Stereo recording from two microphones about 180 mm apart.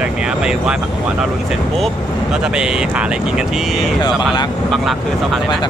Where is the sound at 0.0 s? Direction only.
5° right (ahead or behind).